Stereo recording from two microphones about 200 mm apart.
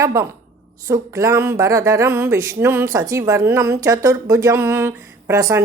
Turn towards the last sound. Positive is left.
turn(degrees=-15)  # may be behind; listen again after turning